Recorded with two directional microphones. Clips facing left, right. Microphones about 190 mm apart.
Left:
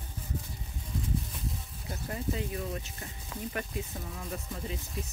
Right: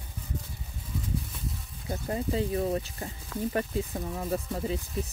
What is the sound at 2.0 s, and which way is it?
Speech, 30° right (ahead or behind).